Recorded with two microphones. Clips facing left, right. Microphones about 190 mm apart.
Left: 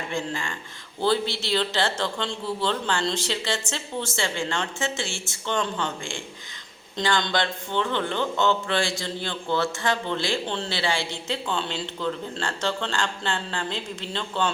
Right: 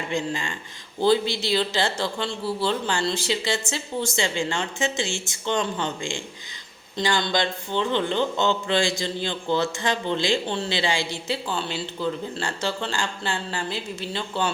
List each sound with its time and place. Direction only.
0.1 s a man's voice: 15° right (ahead or behind)